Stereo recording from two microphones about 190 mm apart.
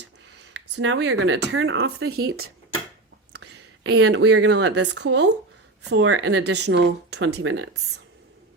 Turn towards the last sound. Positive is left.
turn(degrees=-70)  # may be behind; listen again after turning